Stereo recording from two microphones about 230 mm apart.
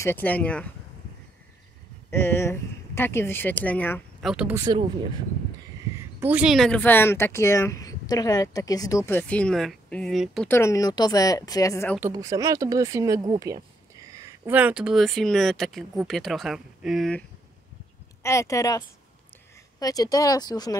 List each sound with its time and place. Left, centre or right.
0.0 s speech: centre
2.0 s speech: centre
4.3 s speech: centre
5.9 s speech: centre
10.5 s speech: centre
12.0 s speech: centre
18.2 s speech: centre